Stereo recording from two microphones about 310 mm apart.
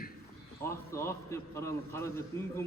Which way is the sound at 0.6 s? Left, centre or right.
Centre.